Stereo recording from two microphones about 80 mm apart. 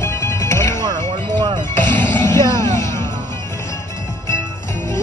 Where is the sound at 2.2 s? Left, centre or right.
Left.